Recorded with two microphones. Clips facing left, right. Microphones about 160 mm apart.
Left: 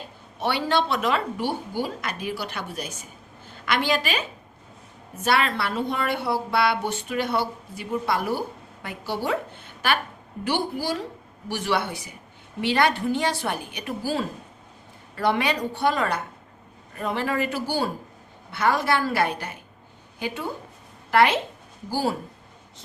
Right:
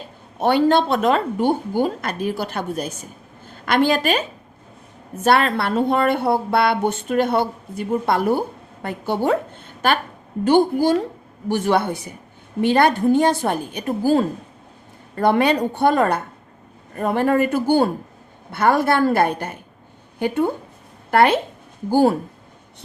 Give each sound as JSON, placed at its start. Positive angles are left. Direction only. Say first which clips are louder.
{"t": 0.3, "sound": "a woman's voice", "louder": "right 8 dB", "side_deg": -50}